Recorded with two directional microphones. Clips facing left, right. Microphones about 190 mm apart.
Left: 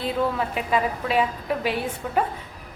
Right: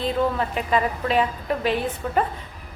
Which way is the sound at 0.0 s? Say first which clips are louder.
Right 2 dB; 5° left (ahead or behind).